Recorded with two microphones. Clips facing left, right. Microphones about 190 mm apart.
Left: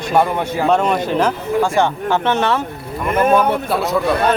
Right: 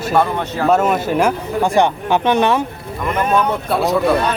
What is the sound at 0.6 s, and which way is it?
Speech, 5° right (ahead or behind).